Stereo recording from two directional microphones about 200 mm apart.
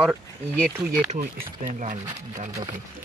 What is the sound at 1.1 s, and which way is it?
Speech, 35° right (ahead or behind).